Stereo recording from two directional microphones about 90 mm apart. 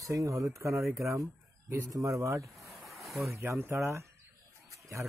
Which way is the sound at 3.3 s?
30° right (ahead or behind).